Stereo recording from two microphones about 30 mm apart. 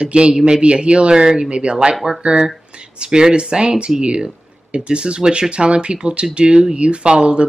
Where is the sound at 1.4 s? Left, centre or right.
Right.